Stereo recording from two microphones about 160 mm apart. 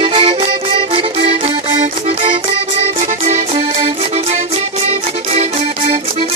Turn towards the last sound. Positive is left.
turn(degrees=-40)  # may be behind; listen again after turning